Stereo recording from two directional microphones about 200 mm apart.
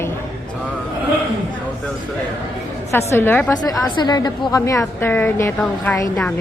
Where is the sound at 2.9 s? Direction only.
15° left (ahead or behind).